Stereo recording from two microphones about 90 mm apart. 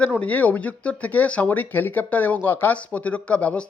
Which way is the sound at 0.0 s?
15° left (ahead or behind).